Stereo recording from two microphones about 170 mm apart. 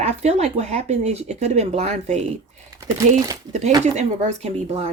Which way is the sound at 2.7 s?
20° right (ahead or behind).